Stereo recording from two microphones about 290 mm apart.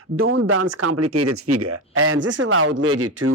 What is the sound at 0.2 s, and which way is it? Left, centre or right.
Speech, right.